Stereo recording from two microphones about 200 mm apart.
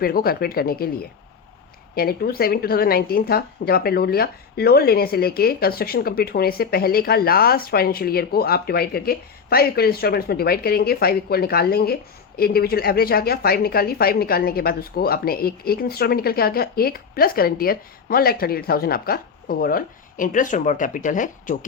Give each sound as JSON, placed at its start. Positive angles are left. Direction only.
{"t": 0.0, "sound": "speech", "side_deg": 50}
{"t": 2.0, "sound": "speech", "side_deg": 50}